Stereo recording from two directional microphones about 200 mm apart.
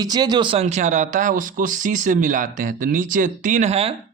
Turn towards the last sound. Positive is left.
turn(degrees=-30)  # may be behind; listen again after turning